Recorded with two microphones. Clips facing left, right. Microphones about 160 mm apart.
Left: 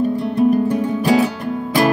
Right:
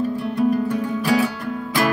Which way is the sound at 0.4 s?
20° left (ahead or behind).